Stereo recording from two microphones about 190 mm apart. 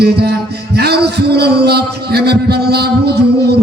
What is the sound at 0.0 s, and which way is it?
A man's voice, 60° right (ahead or behind).